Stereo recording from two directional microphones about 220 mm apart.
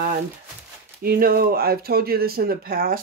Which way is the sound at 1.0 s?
45° right (ahead or behind).